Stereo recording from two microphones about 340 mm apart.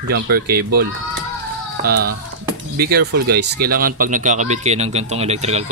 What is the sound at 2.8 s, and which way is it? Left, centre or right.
Speech, right.